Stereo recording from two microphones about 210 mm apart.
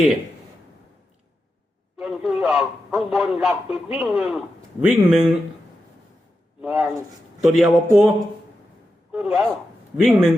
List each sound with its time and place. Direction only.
2.0 s a man's voice: 5° right (ahead or behind)
6.6 s speech: 5° right (ahead or behind)
9.1 s speech: 5° right (ahead or behind)